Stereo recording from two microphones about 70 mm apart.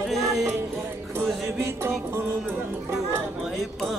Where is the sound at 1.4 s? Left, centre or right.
Right.